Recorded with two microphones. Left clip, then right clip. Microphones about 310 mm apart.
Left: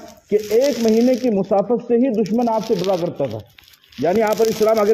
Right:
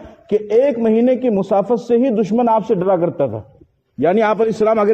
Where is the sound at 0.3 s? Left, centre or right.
Right.